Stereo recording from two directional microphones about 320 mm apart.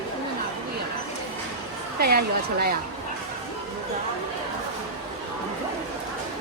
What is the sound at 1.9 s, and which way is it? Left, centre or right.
Speech, right.